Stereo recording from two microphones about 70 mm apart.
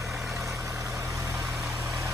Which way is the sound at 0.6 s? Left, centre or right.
Right.